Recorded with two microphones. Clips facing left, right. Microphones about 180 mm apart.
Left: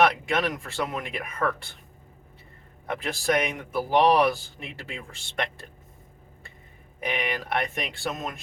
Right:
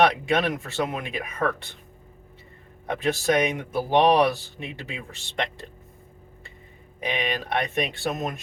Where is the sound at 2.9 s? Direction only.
20° right (ahead or behind).